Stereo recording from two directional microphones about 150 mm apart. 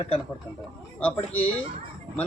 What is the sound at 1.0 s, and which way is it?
Speech, 10° left (ahead or behind).